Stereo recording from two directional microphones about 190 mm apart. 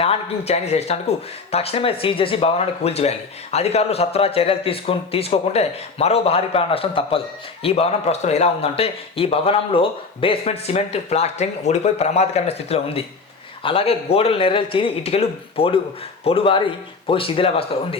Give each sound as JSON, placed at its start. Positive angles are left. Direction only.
{"t": 0.0, "sound": "a man's voice", "side_deg": 30}